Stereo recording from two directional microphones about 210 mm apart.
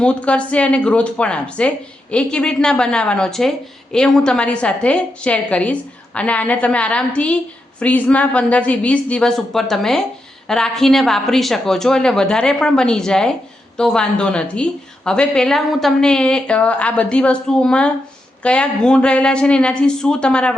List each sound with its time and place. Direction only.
0.0 s a woman's voice: 5° left (ahead or behind)